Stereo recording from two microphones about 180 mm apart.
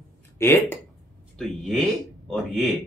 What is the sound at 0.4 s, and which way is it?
Speech, 15° left (ahead or behind).